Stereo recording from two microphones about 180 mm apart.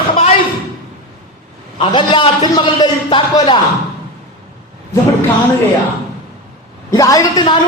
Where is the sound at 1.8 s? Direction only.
25° left (ahead or behind).